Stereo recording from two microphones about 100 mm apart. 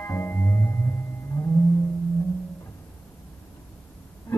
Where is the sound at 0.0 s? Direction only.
20° left (ahead or behind).